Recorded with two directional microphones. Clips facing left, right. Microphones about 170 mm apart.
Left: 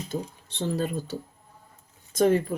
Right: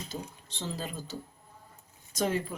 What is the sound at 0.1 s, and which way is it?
Speech, 55° left (ahead or behind).